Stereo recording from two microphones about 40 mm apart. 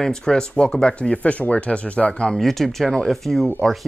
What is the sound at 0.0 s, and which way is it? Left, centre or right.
Speech, centre.